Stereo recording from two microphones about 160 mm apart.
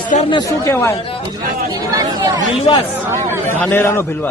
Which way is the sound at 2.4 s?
30° left (ahead or behind).